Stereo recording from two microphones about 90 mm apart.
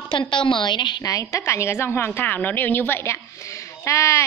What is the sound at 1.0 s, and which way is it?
A woman's voice, 35° left (ahead or behind).